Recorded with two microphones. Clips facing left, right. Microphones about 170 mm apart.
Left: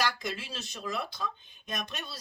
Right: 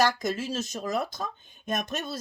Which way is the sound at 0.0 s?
45° right (ahead or behind).